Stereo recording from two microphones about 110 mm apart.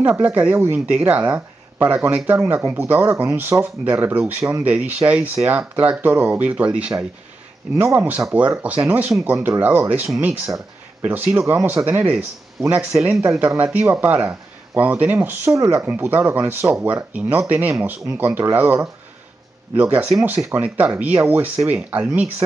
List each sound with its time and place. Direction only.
0.0 s speech: 20° right (ahead or behind)
7.7 s speech: 25° right (ahead or behind)
8.2 s speech: 10° right (ahead or behind)
10.0 s speech: 5° right (ahead or behind)
13.2 s speech: 25° right (ahead or behind)
15.5 s speech: 30° right (ahead or behind)
15.8 s speech: 15° right (ahead or behind)